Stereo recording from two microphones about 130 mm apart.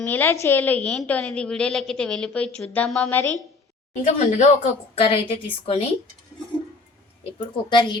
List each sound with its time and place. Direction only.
0.0 s a woman's voice: 20° left (ahead or behind)
4.0 s speech: 70° left (ahead or behind)
4.9 s a woman's voice: 45° left (ahead or behind)
7.3 s a woman's voice: 40° left (ahead or behind)